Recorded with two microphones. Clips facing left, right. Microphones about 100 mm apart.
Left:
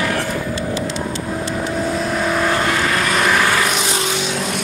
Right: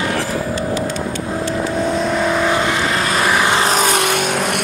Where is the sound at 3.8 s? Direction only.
60° right (ahead or behind).